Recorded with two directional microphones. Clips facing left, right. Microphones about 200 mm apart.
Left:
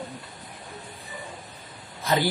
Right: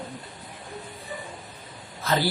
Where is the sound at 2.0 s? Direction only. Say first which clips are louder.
Left 1 dB; 15° left (ahead or behind).